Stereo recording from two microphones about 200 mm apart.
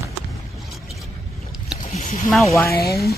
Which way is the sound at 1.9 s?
40° left (ahead or behind).